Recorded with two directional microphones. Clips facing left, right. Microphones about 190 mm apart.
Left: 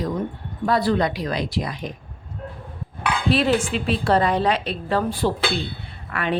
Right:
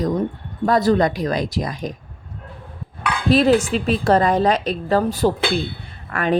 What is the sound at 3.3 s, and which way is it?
A woman's voice, 40° right (ahead or behind).